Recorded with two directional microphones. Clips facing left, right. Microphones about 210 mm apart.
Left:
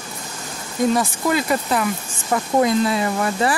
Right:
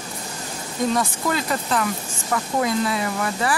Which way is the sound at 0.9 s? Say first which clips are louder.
Left 3 dB; 10° left (ahead or behind).